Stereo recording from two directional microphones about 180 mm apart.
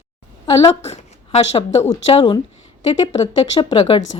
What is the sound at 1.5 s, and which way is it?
Speech, 35° left (ahead or behind).